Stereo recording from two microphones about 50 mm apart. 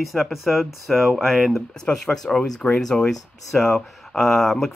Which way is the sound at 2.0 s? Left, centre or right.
Centre.